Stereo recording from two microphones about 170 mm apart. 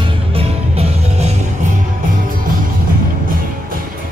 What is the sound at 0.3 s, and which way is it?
Music, 35° right (ahead or behind).